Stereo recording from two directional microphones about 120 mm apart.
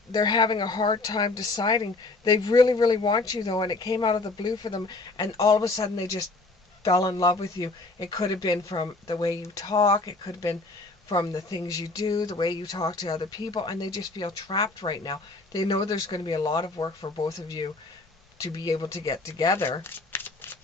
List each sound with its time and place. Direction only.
0.1 s speech: 35° left (ahead or behind); by 20.6 s 20° left (ahead or behind)